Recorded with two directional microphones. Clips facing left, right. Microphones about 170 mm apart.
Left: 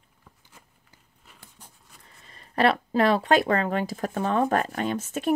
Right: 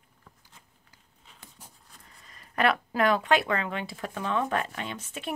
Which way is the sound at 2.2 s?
30° left (ahead or behind).